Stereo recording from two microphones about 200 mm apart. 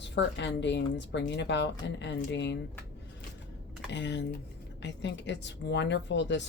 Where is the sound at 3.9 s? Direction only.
60° left (ahead or behind).